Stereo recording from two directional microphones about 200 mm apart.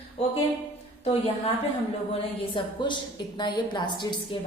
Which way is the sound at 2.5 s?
25° left (ahead or behind).